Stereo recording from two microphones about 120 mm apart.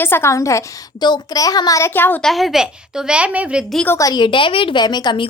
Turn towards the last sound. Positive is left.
turn(degrees=35)  # may be behind; listen again after turning